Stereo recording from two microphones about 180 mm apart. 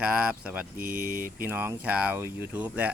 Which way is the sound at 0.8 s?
55° right (ahead or behind).